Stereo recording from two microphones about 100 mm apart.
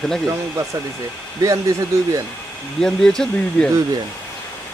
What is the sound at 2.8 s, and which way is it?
Speech, 5° left (ahead or behind).